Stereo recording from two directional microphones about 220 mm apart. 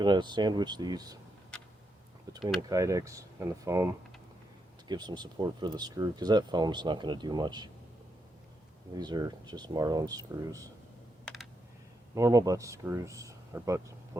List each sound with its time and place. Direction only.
0.0 s speech: 20° right (ahead or behind)
1.5 s tick-tock: 5° left (ahead or behind)
2.6 s speech: 15° right (ahead or behind)
9.0 s speech: 20° right (ahead or behind)
12.1 s speech: 15° right (ahead or behind)